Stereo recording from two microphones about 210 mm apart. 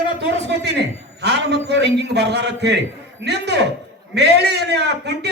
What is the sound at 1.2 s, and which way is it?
A man's voice, 50° right (ahead or behind).